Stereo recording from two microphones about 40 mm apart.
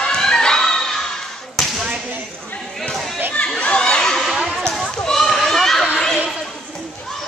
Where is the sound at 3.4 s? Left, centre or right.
Left; by 5.9 s centre.